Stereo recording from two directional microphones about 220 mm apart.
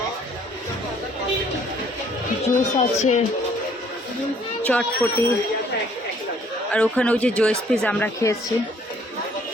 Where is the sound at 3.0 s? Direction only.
30° left (ahead or behind).